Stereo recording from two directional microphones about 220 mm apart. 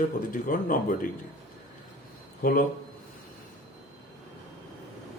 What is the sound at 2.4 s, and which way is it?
Speech, 40° left (ahead or behind).